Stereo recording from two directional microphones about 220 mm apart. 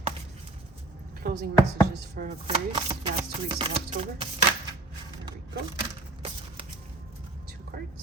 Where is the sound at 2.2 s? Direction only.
40° right (ahead or behind).